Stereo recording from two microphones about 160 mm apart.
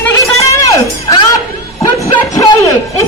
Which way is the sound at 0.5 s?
20° left (ahead or behind).